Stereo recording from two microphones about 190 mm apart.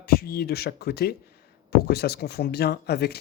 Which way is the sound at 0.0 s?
55° left (ahead or behind).